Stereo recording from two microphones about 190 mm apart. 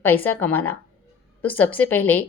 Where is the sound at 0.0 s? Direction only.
10° left (ahead or behind).